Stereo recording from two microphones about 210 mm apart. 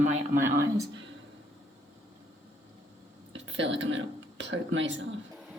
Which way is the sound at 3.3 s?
60° right (ahead or behind).